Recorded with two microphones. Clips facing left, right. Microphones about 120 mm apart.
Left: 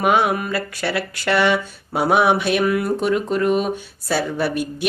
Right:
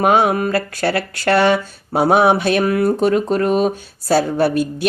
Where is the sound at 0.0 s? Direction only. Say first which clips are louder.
Right 4 dB; 35° right (ahead or behind).